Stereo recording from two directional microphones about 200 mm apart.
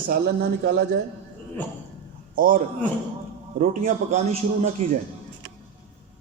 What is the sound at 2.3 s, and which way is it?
Speech, 45° right (ahead or behind).